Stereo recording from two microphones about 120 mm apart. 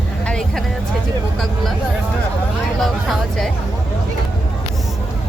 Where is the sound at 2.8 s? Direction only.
Centre (ahead or behind).